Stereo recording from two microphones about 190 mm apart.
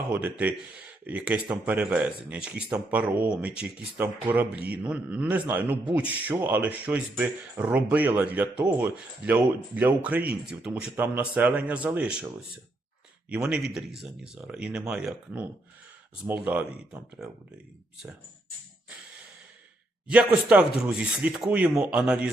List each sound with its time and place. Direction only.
0.1 s a man's voice: 10° right (ahead or behind)
13.3 s a man's voice: 5° right (ahead or behind)
20.1 s speech: 5° right (ahead or behind)